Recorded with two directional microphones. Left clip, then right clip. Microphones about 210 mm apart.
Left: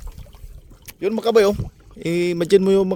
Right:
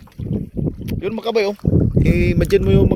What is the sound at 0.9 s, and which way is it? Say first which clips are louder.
Speech: left 3 dB; 20° left (ahead or behind).